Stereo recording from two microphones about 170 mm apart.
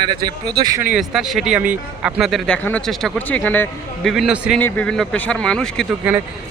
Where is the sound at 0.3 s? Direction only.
25° right (ahead or behind).